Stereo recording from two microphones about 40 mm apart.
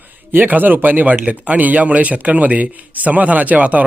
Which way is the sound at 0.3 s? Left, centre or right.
Right.